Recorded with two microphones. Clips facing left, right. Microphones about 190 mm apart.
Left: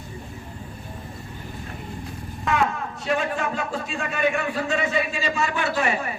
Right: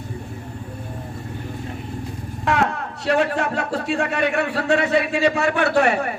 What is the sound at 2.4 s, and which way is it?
A man's voice, 70° right (ahead or behind).